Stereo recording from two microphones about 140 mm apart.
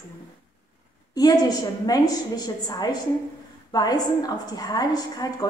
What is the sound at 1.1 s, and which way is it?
A woman's voice, 25° left (ahead or behind).